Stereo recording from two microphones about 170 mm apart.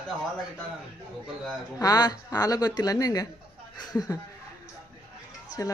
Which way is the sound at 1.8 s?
25° left (ahead or behind).